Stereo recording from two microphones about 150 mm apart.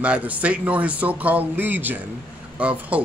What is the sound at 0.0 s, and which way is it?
Speech, 10° right (ahead or behind).